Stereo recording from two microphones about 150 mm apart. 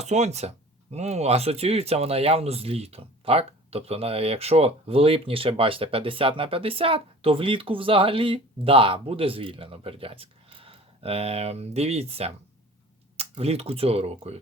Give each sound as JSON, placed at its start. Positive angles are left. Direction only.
{"t": 0.0, "sound": "speech", "side_deg": -50}